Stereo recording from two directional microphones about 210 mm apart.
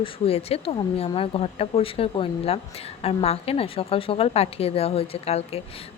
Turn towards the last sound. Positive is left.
turn(degrees=30)  # may be behind; listen again after turning